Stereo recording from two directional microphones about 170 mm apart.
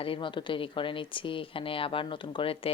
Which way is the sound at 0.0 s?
30° left (ahead or behind).